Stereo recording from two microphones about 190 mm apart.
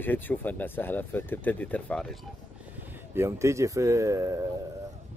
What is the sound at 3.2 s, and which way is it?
Speech, 15° right (ahead or behind).